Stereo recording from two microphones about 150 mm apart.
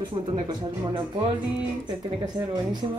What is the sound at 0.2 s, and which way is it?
Speech, 35° right (ahead or behind).